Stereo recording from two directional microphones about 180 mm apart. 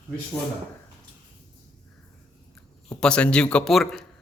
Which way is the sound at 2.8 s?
5° left (ahead or behind).